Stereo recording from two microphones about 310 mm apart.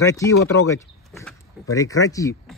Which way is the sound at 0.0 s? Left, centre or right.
Centre.